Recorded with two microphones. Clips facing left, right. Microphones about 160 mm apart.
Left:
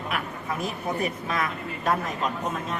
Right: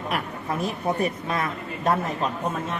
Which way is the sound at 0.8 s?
35° right (ahead or behind).